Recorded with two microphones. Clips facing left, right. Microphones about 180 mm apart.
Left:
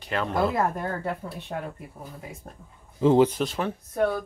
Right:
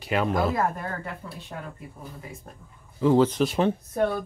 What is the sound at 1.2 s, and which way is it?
Speech, 35° left (ahead or behind).